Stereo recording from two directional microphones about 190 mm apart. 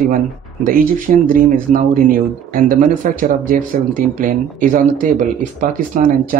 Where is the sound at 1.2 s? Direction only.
45° right (ahead or behind).